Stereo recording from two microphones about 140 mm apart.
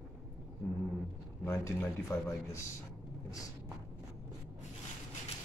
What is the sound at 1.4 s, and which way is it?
Speech, 20° left (ahead or behind).